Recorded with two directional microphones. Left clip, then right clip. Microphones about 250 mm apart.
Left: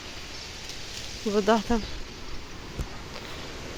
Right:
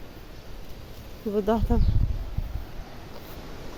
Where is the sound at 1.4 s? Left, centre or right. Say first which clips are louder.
Left 2 dB; centre.